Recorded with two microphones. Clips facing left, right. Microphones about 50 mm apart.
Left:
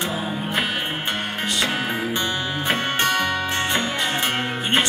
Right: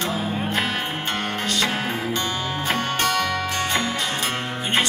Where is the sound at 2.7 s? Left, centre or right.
Left.